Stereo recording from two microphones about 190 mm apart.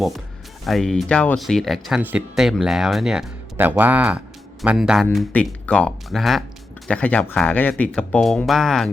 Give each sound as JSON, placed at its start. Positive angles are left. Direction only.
{"t": 0.6, "sound": "speech", "side_deg": 0}